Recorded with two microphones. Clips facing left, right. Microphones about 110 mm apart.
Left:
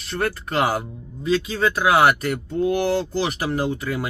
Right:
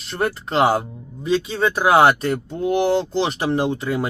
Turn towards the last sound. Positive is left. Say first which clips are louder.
# right 3 dB
turn(degrees=-25)  # may be behind; listen again after turning